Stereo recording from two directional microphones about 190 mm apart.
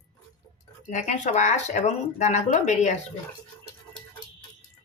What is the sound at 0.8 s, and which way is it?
Speech, 40° left (ahead or behind).